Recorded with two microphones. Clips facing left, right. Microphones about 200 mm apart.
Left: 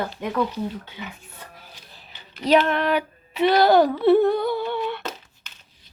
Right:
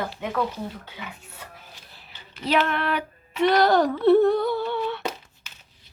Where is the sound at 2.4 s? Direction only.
15° left (ahead or behind).